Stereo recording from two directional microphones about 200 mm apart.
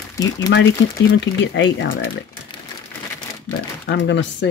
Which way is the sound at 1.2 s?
65° left (ahead or behind).